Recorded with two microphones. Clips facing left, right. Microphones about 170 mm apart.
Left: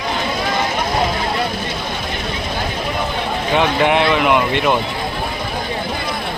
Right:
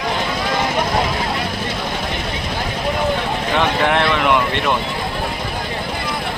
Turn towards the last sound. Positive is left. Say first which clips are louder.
# left 2 dB
turn(degrees=5)  # may be behind; listen again after turning